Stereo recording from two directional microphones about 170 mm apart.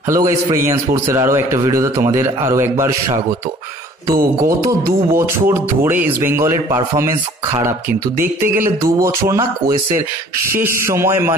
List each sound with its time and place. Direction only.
0.1 s speech: 20° right (ahead or behind)
4.1 s speech: 60° right (ahead or behind)
4.5 s speech: 20° right (ahead or behind)
8.5 s speech: 15° right (ahead or behind)